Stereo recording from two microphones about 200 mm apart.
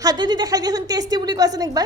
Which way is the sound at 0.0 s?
20° right (ahead or behind).